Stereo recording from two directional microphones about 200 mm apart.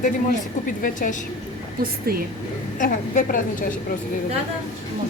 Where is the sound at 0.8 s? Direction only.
45° left (ahead or behind).